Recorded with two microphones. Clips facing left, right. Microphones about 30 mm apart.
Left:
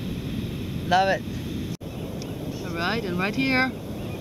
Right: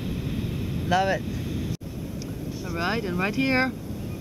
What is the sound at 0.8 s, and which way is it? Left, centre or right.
Speech, centre.